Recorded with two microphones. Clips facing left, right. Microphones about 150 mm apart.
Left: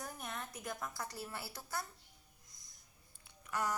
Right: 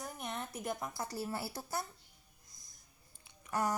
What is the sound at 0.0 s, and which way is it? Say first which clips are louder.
A woman's voice: right 3 dB; 20° right (ahead or behind).